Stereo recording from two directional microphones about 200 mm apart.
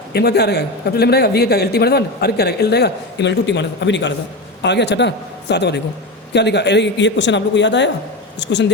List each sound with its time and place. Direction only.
0.1 s a man's voice: 55° left (ahead or behind)